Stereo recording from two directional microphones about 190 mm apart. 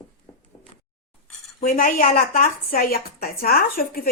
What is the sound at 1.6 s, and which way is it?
A woman's voice, 45° left (ahead or behind).